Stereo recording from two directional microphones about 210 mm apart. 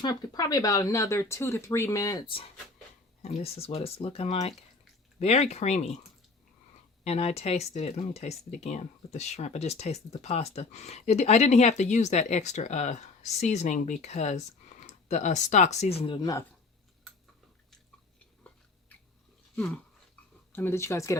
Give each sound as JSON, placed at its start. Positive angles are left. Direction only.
{"t": 0.0, "sound": "speech", "side_deg": 20}
{"t": 7.0, "sound": "speech", "side_deg": 30}
{"t": 20.5, "sound": "speech", "side_deg": 10}